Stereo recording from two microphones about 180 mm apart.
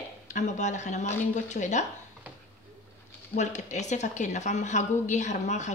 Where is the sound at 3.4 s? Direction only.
40° left (ahead or behind).